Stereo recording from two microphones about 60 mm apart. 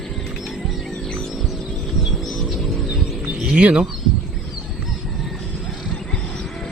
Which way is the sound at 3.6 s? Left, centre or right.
Centre.